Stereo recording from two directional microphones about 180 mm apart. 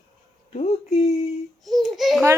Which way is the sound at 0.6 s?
40° left (ahead or behind).